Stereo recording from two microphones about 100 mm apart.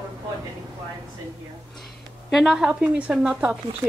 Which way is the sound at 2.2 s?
5° right (ahead or behind).